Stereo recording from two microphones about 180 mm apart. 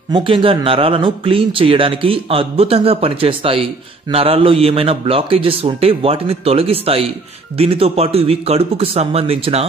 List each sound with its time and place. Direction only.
0.1 s speech: 30° right (ahead or behind)